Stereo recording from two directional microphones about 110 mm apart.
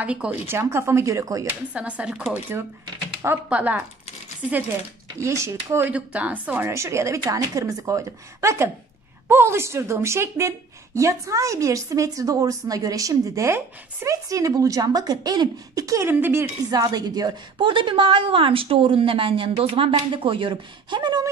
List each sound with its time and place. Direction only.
0.0 s speech: 10° right (ahead or behind)
0.5 s a woman's voice: 25° right (ahead or behind)
1.7 s speech: 10° right (ahead or behind)
3.4 s speech: 10° right (ahead or behind)
5.2 s a woman's voice: 25° right (ahead or behind)
5.9 s a woman's voice: 15° right (ahead or behind); by 16.1 s 30° right (ahead or behind)
16.1 s a woman's voice: 20° right (ahead or behind)
16.7 s a woman's voice: 35° right (ahead or behind)